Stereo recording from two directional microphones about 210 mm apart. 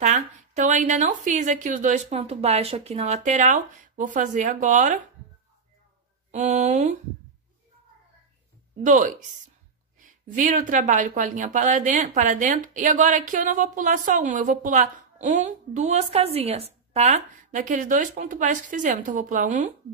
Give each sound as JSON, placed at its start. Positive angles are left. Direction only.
{"t": 0.0, "sound": "speech", "side_deg": -35}
{"t": 6.3, "sound": "speech", "side_deg": -35}
{"t": 8.8, "sound": "speech", "side_deg": -35}
{"t": 10.2, "sound": "speech", "side_deg": -40}